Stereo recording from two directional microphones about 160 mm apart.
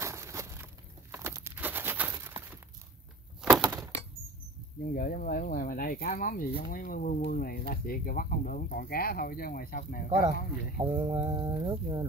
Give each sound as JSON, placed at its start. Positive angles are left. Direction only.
{"t": 0.0, "sound": "crushing", "side_deg": -20}
{"t": 1.1, "sound": "a sound", "side_deg": -15}
{"t": 3.3, "sound": "breaking", "side_deg": 0}
{"t": 3.6, "sound": "breaking", "side_deg": -20}
{"t": 4.8, "sound": "speech", "side_deg": 65}
{"t": 10.8, "sound": "speech", "side_deg": -35}